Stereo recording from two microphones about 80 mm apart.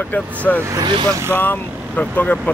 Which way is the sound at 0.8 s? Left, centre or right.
Right.